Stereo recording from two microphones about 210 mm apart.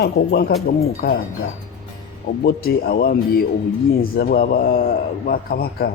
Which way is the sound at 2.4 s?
45° left (ahead or behind).